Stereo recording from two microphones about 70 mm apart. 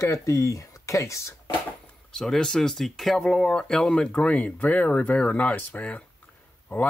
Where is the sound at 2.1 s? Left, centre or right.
Centre.